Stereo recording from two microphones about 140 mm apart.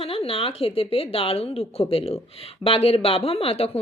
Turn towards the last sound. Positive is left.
turn(degrees=45)  # may be behind; listen again after turning